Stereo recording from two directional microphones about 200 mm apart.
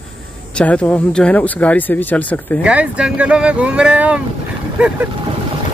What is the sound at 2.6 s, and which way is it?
Speech, 5° right (ahead or behind).